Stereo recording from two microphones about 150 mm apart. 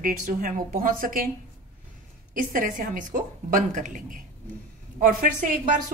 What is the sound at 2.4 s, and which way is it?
A woman's voice, 65° right (ahead or behind).